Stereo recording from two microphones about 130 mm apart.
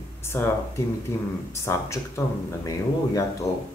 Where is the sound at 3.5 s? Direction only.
25° left (ahead or behind).